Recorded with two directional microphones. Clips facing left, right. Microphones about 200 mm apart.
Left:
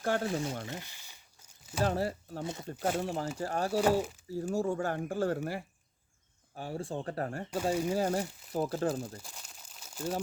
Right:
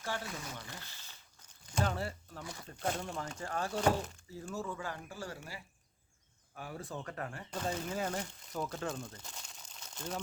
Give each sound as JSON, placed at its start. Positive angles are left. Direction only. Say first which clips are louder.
{"t": 0.0, "sound": "speech", "louder": "left 9 dB", "side_deg": 50}
{"t": 0.3, "sound": "speech", "louder": "left 12 dB", "side_deg": 30}
{"t": 0.6, "sound": "crumpling", "louder": "left 8 dB", "side_deg": 20}
{"t": 1.8, "sound": "speech", "louder": "left 5 dB", "side_deg": 40}
{"t": 2.4, "sound": "speech", "louder": "left 8 dB", "side_deg": 25}
{"t": 3.3, "sound": "speech", "louder": "left 4 dB", "side_deg": 35}
{"t": 3.8, "sound": "speech", "louder": "left 4 dB", "side_deg": 5}
{"t": 4.4, "sound": "speech", "louder": "left 9 dB", "side_deg": 40}
{"t": 6.5, "sound": "speech", "louder": "left 6 dB", "side_deg": 30}
{"t": 7.5, "sound": "speech", "louder": "left 7 dB", "side_deg": 10}
{"t": 7.9, "sound": "speech", "louder": "left 7 dB", "side_deg": 35}
{"t": 9.1, "sound": "crumpling", "louder": "left 3 dB", "side_deg": 5}